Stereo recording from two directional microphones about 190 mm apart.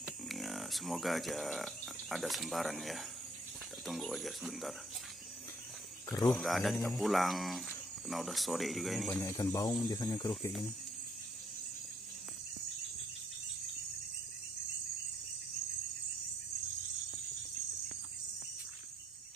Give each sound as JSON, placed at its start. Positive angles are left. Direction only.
{"t": 0.3, "sound": "speech", "side_deg": 0}
{"t": 6.0, "sound": "speech", "side_deg": 20}
{"t": 6.3, "sound": "speech", "side_deg": 0}
{"t": 9.2, "sound": "speech", "side_deg": 20}